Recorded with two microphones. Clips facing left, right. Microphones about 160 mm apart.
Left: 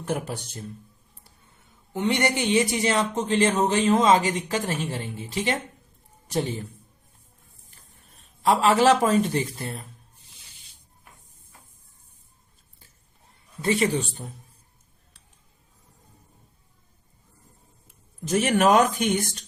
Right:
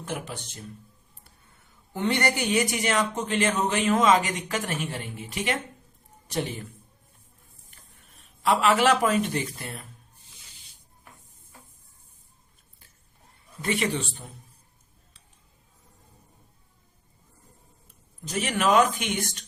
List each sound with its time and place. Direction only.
1.9 s a man's voice: 20° left (ahead or behind)
8.4 s a man's voice: 35° left (ahead or behind)
13.6 s a man's voice: 35° left (ahead or behind)
18.3 s speech: 50° left (ahead or behind)